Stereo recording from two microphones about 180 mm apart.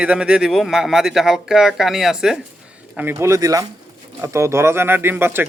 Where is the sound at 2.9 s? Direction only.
15° right (ahead or behind).